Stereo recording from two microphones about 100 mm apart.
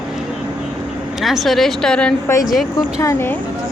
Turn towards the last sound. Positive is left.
turn(degrees=30)  # may be behind; listen again after turning